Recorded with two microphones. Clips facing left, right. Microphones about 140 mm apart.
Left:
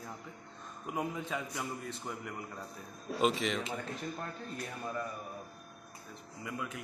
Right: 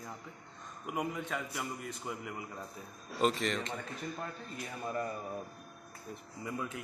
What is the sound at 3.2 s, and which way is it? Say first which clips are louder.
Speech: even; centre (ahead or behind).